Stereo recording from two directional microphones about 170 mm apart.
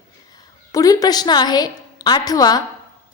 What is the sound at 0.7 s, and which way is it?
A woman's voice, 20° left (ahead or behind).